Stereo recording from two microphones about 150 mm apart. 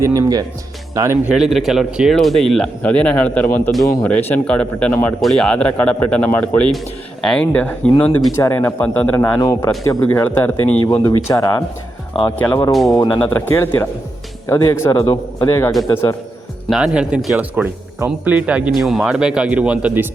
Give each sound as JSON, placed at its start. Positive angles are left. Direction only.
{"t": 0.0, "sound": "speech", "side_deg": -20}
{"t": 1.3, "sound": "speech", "side_deg": 0}
{"t": 12.4, "sound": "speech", "side_deg": 10}
{"t": 12.7, "sound": "speech", "side_deg": 0}
{"t": 13.2, "sound": "speech", "side_deg": 15}
{"t": 16.6, "sound": "speech", "side_deg": -5}